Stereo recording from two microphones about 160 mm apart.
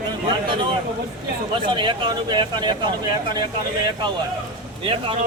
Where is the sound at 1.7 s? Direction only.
30° right (ahead or behind).